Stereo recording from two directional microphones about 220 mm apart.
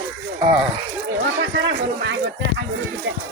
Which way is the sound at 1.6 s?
55° right (ahead or behind).